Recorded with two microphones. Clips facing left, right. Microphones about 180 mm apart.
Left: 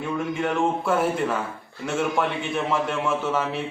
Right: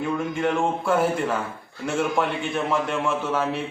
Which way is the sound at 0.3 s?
Centre (ahead or behind).